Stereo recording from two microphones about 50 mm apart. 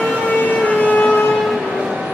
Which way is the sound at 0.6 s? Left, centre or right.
Left.